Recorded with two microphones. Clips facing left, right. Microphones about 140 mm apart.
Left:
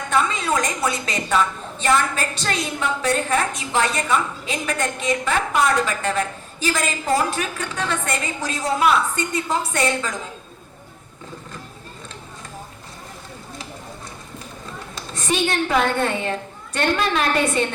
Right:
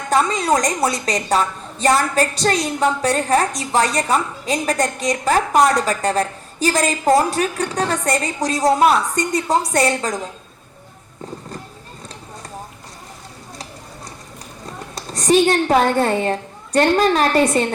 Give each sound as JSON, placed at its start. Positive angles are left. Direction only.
{"t": 0.1, "sound": "a woman's voice", "side_deg": -35}
{"t": 14.9, "sound": "a woman's voice", "side_deg": -35}